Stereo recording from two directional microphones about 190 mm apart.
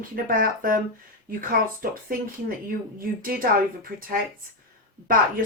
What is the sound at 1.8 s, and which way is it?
Speech, 50° right (ahead or behind).